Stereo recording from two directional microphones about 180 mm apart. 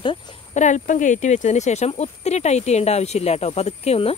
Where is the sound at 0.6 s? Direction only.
45° left (ahead or behind).